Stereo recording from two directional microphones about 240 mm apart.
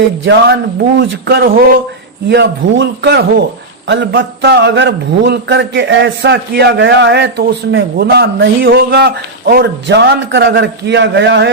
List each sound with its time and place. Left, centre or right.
0.3 s a man's voice: right